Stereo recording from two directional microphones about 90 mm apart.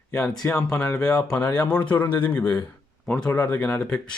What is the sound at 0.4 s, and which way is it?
Speech, 35° left (ahead or behind).